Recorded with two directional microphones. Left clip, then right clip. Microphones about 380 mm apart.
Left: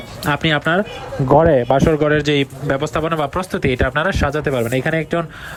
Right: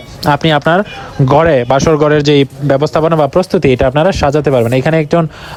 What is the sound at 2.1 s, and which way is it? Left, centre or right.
Speech, centre.